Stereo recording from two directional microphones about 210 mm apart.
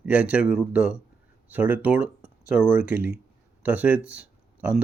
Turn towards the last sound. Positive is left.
turn(degrees=-5)  # may be behind; listen again after turning